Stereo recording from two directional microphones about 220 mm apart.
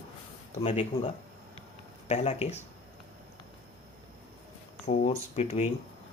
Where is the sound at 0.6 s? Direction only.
30° left (ahead or behind).